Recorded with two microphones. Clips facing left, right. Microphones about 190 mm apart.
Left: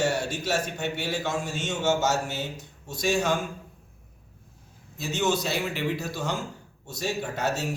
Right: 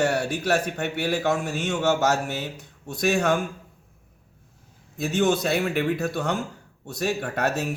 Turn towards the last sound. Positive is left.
turn(degrees=-60)  # may be behind; listen again after turning